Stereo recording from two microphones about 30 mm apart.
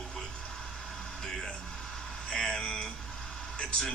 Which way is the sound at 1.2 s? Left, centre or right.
Left.